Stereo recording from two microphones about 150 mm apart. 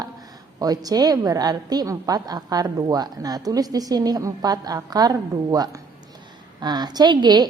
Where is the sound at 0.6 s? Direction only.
25° right (ahead or behind).